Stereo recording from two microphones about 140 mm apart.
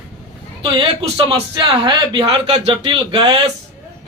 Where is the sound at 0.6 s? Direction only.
35° right (ahead or behind).